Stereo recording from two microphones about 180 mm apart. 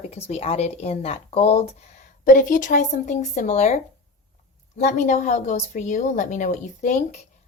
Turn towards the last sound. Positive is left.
turn(degrees=40)  # may be behind; listen again after turning